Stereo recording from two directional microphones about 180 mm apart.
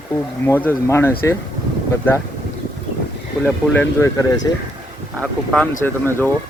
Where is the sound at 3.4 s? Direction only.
10° left (ahead or behind).